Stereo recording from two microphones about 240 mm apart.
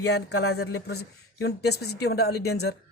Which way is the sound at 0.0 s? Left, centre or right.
Left.